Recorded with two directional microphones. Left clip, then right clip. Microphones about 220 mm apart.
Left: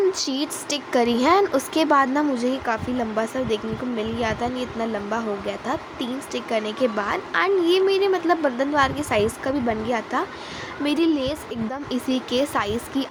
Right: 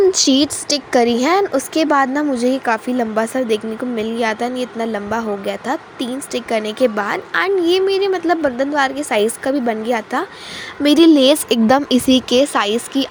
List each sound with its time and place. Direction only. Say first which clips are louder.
0.1 s a woman's voice: right 11 dB; 30° right (ahead or behind)
0.7 s a woman's voice: right 5 dB; 15° right (ahead or behind)
10.8 s speech: right 12 dB; 35° right (ahead or behind)